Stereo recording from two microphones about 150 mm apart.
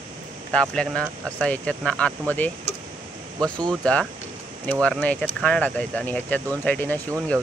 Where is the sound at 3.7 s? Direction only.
5° left (ahead or behind).